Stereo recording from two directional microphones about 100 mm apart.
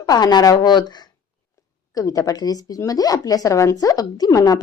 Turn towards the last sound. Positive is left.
turn(degrees=40)  # may be behind; listen again after turning